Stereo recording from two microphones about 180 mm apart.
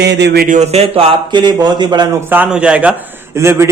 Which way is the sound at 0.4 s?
40° right (ahead or behind).